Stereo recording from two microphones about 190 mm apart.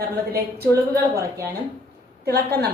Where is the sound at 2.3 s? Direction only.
60° right (ahead or behind).